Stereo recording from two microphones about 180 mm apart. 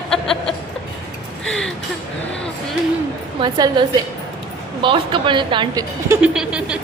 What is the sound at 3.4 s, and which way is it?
A woman's voice, 25° right (ahead or behind).